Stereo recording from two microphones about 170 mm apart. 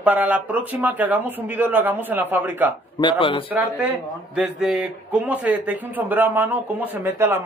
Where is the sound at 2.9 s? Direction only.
30° left (ahead or behind).